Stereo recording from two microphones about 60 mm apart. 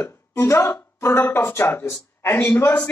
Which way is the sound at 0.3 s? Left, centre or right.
Left.